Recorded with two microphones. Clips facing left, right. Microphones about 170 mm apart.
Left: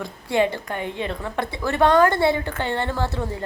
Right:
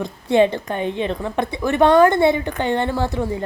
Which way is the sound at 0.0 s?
20° right (ahead or behind).